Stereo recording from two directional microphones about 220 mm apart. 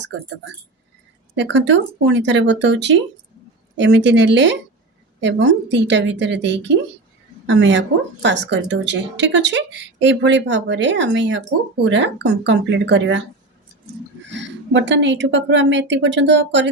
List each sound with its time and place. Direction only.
1.4 s speech: 55° right (ahead or behind)
14.3 s speech: 55° right (ahead or behind)